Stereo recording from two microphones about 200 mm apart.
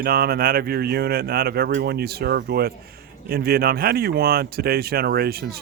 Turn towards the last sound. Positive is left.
turn(degrees=-50)  # may be behind; listen again after turning